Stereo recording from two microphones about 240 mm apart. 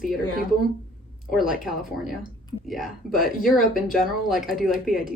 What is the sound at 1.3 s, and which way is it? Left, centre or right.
Speech, centre.